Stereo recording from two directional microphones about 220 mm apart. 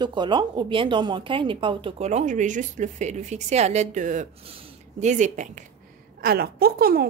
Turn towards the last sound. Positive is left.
turn(degrees=-45)  # may be behind; listen again after turning